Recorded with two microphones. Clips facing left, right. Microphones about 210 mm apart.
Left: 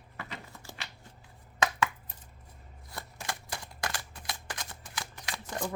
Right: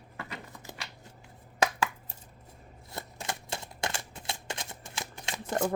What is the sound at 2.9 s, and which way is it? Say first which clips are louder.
Shuffling cards: right 2 dB; 25° right (ahead or behind).